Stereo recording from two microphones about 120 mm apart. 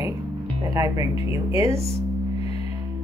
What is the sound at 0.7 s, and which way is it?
Speech, 25° right (ahead or behind).